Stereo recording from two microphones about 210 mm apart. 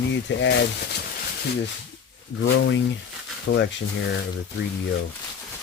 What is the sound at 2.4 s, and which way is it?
Speech, 60° left (ahead or behind).